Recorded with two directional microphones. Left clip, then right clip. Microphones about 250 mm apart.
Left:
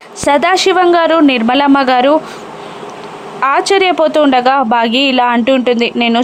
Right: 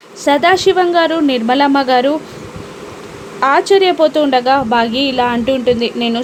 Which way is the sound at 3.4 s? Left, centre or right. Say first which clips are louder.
Even; centre.